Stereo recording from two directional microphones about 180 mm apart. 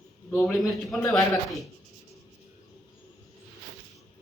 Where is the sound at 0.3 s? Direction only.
Centre (ahead or behind).